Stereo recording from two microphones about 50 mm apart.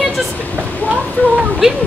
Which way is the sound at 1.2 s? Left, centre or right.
Left.